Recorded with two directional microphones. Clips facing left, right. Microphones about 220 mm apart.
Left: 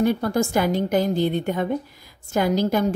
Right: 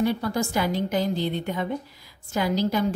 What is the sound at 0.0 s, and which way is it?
A woman's voice, 50° left (ahead or behind).